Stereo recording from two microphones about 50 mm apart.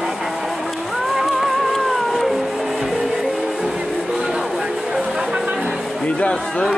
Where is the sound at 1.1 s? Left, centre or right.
Centre.